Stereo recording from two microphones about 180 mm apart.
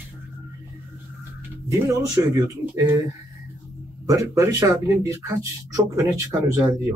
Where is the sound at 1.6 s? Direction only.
20° right (ahead or behind).